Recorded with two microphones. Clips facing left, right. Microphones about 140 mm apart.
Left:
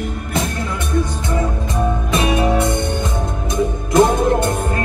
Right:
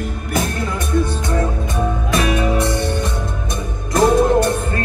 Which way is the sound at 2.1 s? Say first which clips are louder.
Left 1 dB; 25° left (ahead or behind).